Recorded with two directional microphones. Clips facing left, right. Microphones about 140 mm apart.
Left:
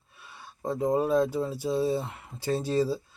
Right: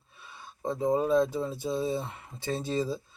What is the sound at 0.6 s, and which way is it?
Speech, 5° left (ahead or behind).